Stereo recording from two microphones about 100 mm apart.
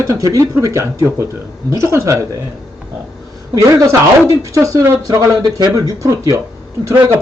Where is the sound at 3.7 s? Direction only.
30° right (ahead or behind).